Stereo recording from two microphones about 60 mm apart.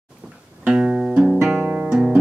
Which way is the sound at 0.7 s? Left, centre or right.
Centre.